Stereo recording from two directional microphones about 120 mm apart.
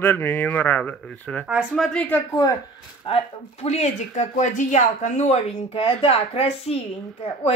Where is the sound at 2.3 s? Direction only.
30° left (ahead or behind).